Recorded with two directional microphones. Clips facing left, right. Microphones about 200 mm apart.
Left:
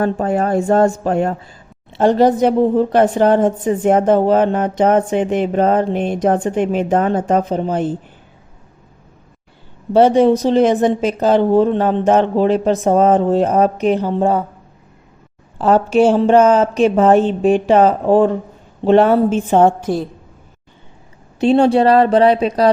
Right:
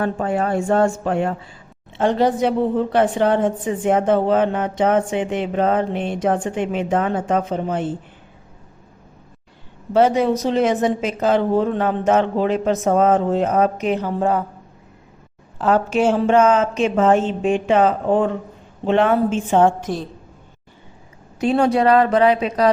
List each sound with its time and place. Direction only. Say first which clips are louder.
0.0 s a woman's voice: left 4 dB; 40° left (ahead or behind)
9.9 s a woman's voice: left 5 dB; 30° left (ahead or behind)
15.5 s a woman's voice: left 5 dB; 30° left (ahead or behind)
21.4 s a woman's voice: left 4 dB; 30° left (ahead or behind)